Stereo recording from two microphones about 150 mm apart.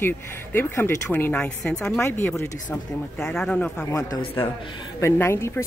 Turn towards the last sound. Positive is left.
turn(degrees=20)  # may be behind; listen again after turning